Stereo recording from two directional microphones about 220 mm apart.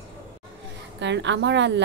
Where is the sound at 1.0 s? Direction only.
55° right (ahead or behind).